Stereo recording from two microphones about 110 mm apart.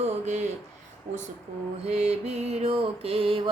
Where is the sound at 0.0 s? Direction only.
90° right.